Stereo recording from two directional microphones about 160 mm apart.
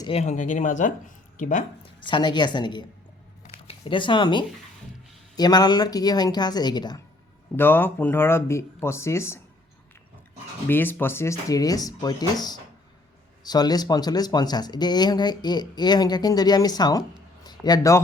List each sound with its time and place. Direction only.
0.1 s speech: 45° left (ahead or behind)
2.0 s speech: 30° left (ahead or behind)
3.4 s a sound: 35° left (ahead or behind)
5.4 s speech: 25° left (ahead or behind)
7.5 s speech: 15° left (ahead or behind)
10.7 s speech: 10° left (ahead or behind)
17.4 s a sound: 25° left (ahead or behind)